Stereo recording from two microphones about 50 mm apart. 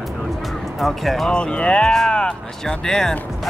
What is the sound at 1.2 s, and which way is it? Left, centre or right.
Speech, centre.